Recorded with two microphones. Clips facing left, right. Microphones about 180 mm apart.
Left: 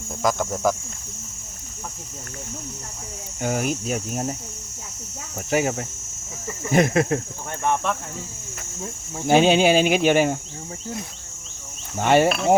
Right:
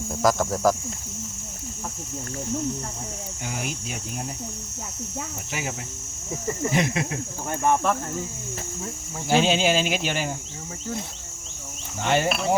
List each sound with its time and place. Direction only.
0.2 s speech: centre (ahead or behind)
3.4 s speech: 50° left (ahead or behind)
5.5 s speech: 45° left (ahead or behind)
6.7 s speech: 50° left (ahead or behind)
7.6 s speech: 5° right (ahead or behind)
9.2 s speech: 55° left (ahead or behind)
11.9 s speech: 50° left (ahead or behind)